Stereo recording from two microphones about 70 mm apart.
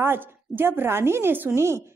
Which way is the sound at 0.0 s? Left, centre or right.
Right.